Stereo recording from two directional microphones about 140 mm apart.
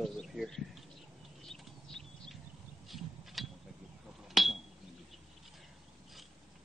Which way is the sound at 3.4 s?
Centre (ahead or behind).